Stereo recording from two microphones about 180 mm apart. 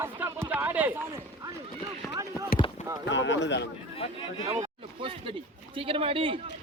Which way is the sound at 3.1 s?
90° left.